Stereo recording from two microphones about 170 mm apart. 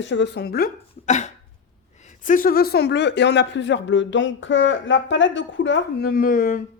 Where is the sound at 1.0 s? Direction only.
45° left (ahead or behind).